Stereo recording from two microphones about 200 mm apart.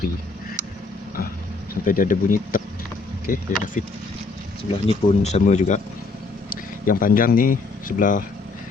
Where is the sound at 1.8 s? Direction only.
40° left (ahead or behind).